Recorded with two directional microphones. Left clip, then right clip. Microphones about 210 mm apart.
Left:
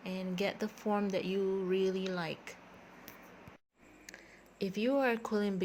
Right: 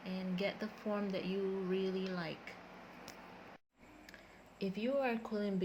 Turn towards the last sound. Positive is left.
turn(degrees=50)  # may be behind; listen again after turning